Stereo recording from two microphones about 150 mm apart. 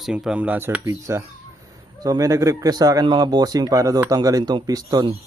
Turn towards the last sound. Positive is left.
turn(degrees=-25)  # may be behind; listen again after turning